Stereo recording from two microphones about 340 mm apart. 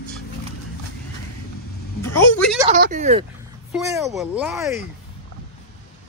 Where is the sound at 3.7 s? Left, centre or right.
Centre.